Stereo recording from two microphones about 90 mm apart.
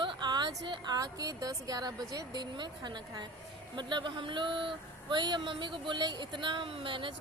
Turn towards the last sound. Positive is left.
turn(degrees=-70)  # may be behind; listen again after turning